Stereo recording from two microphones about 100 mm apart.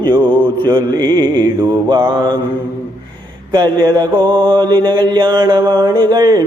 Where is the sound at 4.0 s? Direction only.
45° right (ahead or behind).